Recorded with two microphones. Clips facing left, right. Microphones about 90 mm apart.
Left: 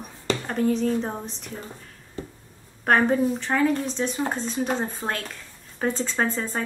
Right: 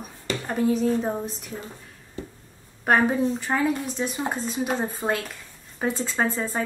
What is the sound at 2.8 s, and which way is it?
Speech, 5° right (ahead or behind).